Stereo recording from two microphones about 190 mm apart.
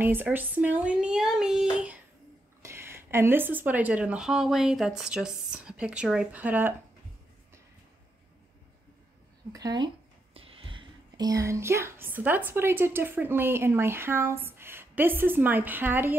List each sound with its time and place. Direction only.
0.0 s speech: 10° right (ahead or behind)
9.5 s speech: 20° right (ahead or behind)
10.3 s speech: 30° right (ahead or behind); by 16.2 s 10° right (ahead or behind)